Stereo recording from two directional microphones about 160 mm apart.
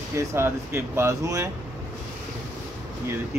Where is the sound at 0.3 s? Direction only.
15° right (ahead or behind).